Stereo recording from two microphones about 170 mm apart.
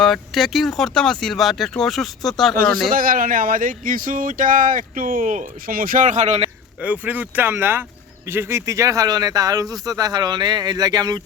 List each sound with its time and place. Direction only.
0.0 s speech: centre (ahead or behind)
2.6 s speech: 60° right (ahead or behind); by 6.5 s 40° right (ahead or behind)
6.8 s speech: 10° right (ahead or behind)